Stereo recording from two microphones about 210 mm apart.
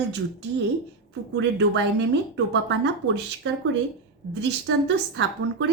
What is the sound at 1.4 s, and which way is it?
A woman's voice, 55° right (ahead or behind).